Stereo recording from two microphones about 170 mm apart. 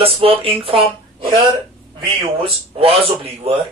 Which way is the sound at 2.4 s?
35° right (ahead or behind).